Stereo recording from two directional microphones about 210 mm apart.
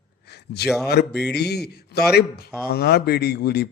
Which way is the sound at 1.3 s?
50° left (ahead or behind).